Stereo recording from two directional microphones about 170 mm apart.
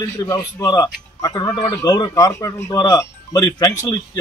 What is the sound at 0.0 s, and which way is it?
A man's voice, 20° left (ahead or behind).